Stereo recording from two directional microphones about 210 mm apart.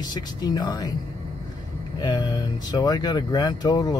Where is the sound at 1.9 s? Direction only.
20° left (ahead or behind).